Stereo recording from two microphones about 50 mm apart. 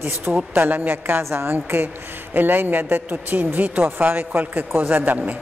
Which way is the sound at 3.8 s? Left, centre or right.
Right.